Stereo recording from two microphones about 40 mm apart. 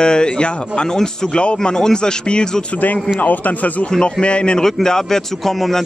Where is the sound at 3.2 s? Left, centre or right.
Left.